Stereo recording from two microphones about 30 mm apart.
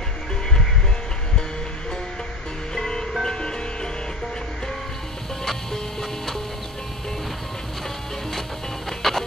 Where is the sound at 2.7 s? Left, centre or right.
Left.